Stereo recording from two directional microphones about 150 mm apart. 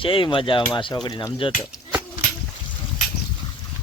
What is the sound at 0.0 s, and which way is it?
Speech, 35° left (ahead or behind).